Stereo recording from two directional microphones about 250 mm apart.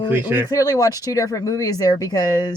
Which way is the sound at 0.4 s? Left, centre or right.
Centre.